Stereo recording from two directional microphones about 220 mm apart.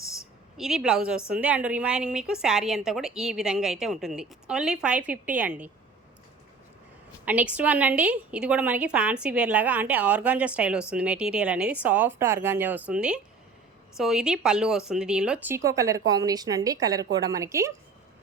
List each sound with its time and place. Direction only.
0.5 s a woman's voice: centre (ahead or behind)
7.3 s a woman's voice: 5° right (ahead or behind)